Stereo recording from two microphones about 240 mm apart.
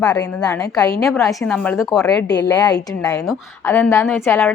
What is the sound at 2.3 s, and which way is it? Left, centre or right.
Speech, centre.